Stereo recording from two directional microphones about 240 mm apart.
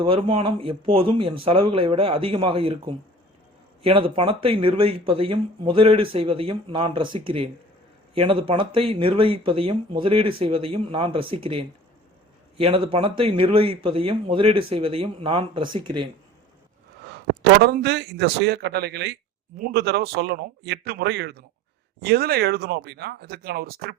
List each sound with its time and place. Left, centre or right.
0.0 s speech: right
17.6 s a man's voice: right